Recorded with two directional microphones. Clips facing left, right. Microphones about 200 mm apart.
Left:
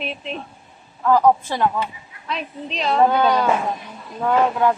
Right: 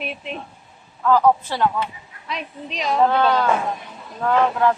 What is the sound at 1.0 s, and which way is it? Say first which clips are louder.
Speech: left 1 dB; 15° left (ahead or behind).